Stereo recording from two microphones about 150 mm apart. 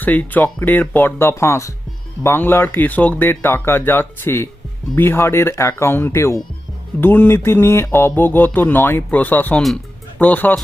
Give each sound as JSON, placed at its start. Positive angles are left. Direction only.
{"t": 0.0, "sound": "speech", "side_deg": 10}